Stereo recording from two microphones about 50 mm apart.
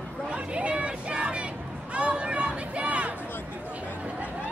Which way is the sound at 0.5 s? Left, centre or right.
Right.